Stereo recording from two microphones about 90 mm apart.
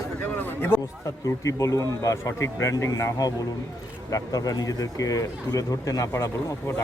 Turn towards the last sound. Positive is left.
turn(degrees=30)  # may be behind; listen again after turning